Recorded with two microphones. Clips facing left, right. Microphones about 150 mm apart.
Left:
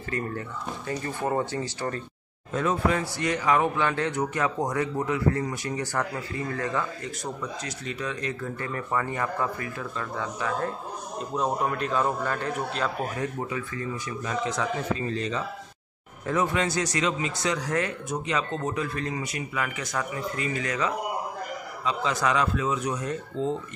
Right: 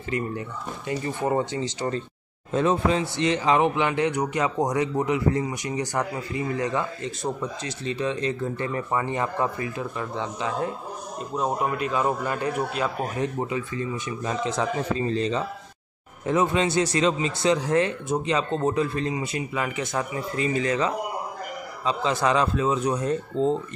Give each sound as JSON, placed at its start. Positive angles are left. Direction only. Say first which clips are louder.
{"t": 0.8, "sound": "speech", "louder": "right 3 dB", "side_deg": -20}
{"t": 11.3, "sound": "a man's voice", "louder": "right 1 dB", "side_deg": -5}
{"t": 13.2, "sound": "speech", "louder": "right 4 dB", "side_deg": -20}